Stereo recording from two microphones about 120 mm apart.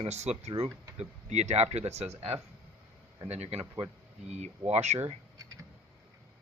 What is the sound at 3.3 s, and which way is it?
Speech, 60° right (ahead or behind).